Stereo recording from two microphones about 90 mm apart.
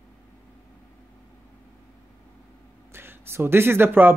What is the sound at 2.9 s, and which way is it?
Speech, 25° right (ahead or behind).